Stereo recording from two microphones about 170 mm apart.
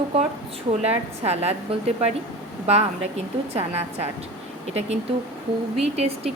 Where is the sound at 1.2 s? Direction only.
35° right (ahead or behind).